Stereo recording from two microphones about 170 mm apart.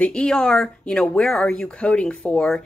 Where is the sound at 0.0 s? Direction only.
5° left (ahead or behind).